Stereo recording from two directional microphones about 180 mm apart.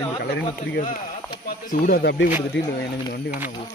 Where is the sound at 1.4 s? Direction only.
50° left (ahead or behind); by 2.7 s 75° left (ahead or behind).